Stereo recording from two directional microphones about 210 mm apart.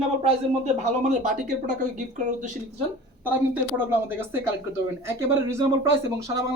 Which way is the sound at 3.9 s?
10° right (ahead or behind).